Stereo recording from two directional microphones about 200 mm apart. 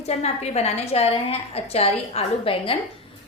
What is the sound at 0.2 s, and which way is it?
A woman's voice, 30° left (ahead or behind).